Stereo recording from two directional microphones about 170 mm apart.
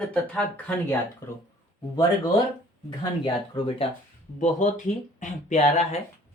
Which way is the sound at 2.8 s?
30° left (ahead or behind).